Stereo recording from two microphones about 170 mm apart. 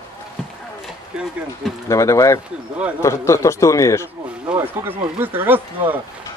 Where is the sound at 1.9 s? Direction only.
20° left (ahead or behind).